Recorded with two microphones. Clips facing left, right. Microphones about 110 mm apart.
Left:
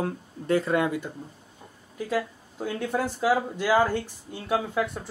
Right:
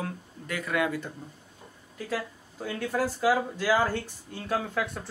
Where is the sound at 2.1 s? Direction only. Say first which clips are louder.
Left 5 dB; 25° left (ahead or behind).